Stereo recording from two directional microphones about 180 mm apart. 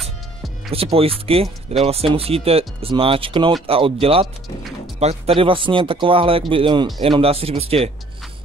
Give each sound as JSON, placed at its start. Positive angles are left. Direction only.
{"t": 0.0, "sound": "music", "side_deg": 0}
{"t": 0.7, "sound": "speech", "side_deg": -30}